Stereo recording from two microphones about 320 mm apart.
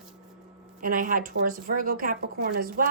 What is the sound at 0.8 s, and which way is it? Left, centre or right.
Speech, right.